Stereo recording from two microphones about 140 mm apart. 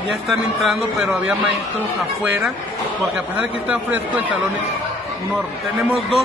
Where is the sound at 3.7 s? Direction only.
10° right (ahead or behind).